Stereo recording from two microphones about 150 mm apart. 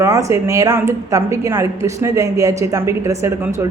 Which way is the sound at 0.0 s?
20° right (ahead or behind).